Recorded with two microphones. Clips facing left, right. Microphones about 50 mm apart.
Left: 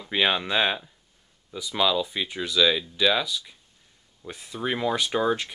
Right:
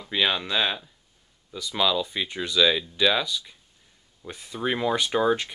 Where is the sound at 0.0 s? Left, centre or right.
Centre.